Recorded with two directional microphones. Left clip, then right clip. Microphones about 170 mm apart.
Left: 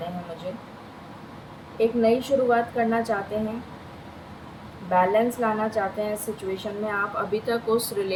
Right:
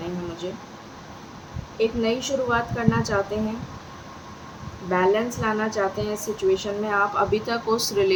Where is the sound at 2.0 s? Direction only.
40° right (ahead or behind).